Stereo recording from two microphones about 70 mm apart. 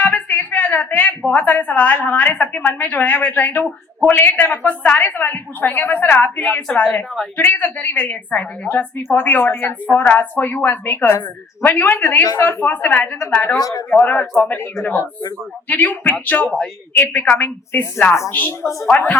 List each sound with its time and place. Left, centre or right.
0.0 s a sound: left
0.3 s a woman's voice: left
12.2 s speech: left
12.5 s a woman's voice: left
13.6 s speech: left
14.0 s a woman's voice: left
15.7 s a woman's voice: left
18.6 s speech: left
18.9 s a woman's voice: left